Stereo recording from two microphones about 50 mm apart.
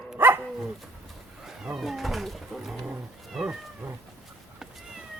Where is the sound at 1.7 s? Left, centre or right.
Centre.